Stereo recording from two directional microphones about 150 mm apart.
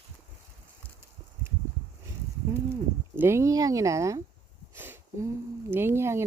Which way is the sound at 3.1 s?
15° right (ahead or behind).